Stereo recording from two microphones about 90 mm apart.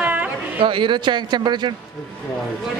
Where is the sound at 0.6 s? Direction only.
70° right (ahead or behind).